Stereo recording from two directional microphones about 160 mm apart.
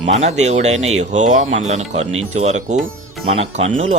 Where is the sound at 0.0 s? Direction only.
45° right (ahead or behind).